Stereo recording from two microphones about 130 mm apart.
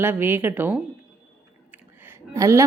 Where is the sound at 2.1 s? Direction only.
25° right (ahead or behind).